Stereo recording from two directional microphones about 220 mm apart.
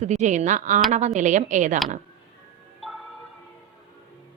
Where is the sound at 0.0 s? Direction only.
30° right (ahead or behind).